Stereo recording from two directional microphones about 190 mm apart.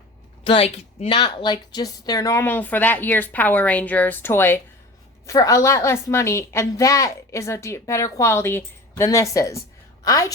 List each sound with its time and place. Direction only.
0.4 s a woman's voice: 30° left (ahead or behind)